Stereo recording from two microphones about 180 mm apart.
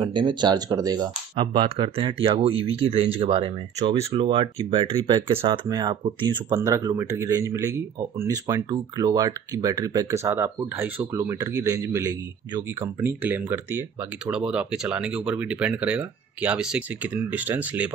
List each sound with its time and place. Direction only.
0.0 s speech: 25° right (ahead or behind); by 17.9 s 10° right (ahead or behind)